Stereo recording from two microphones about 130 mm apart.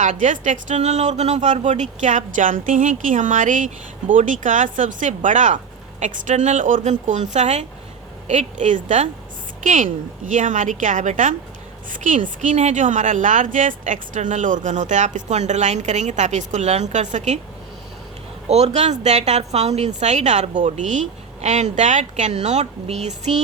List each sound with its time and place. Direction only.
0.0 s a woman's voice: 70° right (ahead or behind)
18.4 s a woman's voice: 60° right (ahead or behind)